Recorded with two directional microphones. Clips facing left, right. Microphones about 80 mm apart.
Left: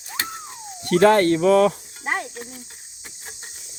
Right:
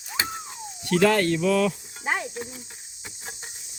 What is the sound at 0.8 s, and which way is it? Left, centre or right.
Speech, left.